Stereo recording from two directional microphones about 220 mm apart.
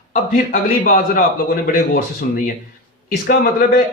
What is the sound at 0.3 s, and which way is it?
A man's voice, 40° left (ahead or behind).